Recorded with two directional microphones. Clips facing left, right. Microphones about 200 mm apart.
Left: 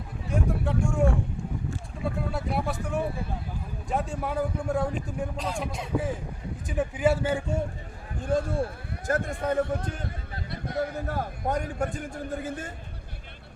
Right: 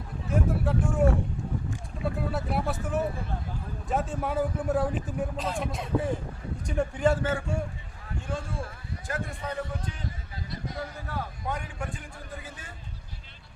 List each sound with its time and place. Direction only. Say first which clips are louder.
0.3 s a man's voice: right 1 dB; 5° right (ahead or behind)
2.3 s speech: even; centre (ahead or behind)
3.8 s a man's voice: even; centre (ahead or behind); by 7.6 s 15° left (ahead or behind)
8.2 s speech: left 9 dB; 35° left (ahead or behind)
9.0 s speech: left 8 dB; 45° left (ahead or behind)